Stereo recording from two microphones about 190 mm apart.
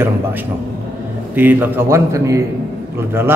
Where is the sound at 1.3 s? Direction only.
10° right (ahead or behind).